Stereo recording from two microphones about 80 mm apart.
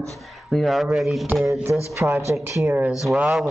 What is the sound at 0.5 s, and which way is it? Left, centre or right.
Speech, centre.